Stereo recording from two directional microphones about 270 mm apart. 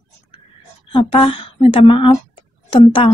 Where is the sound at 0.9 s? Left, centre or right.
Centre.